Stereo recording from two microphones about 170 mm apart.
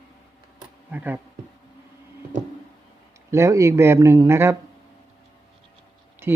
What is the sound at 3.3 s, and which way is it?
Speech, 15° right (ahead or behind).